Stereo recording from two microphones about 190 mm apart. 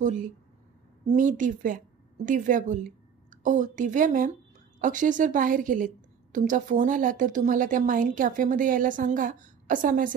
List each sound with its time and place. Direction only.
1.0 s a woman's voice: 45° right (ahead or behind)